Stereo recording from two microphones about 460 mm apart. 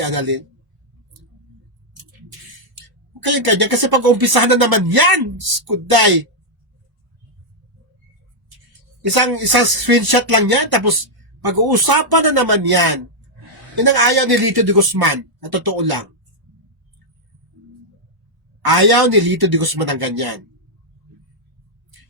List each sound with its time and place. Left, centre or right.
0.0 s a man's voice: right
3.2 s a man's voice: right
9.1 s a man's voice: right
18.6 s a man's voice: right